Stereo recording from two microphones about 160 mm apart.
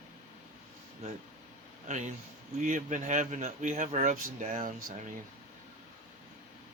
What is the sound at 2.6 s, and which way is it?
Speech, 55° right (ahead or behind).